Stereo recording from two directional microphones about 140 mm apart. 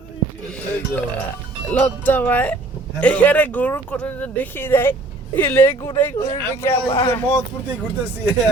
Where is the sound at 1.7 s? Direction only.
10° left (ahead or behind).